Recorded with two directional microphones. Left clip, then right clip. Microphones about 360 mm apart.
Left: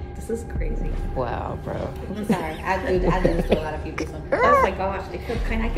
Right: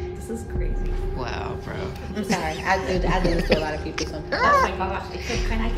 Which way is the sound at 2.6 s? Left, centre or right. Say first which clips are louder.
Left 2 dB; right.